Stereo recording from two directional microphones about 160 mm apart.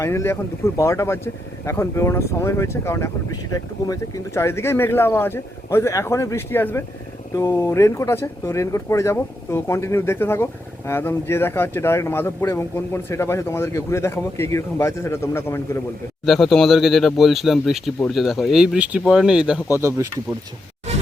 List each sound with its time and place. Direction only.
0.0 s speech: 15° left (ahead or behind)
16.2 s speech: centre (ahead or behind)
19.7 s speech: 20° right (ahead or behind)